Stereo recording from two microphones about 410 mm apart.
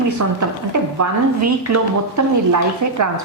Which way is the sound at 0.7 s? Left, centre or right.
Right.